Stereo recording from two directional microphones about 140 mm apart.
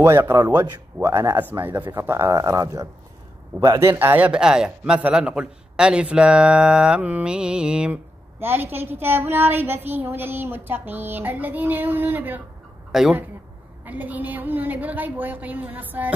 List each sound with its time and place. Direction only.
0.0 s a man's voice: 20° right (ahead or behind)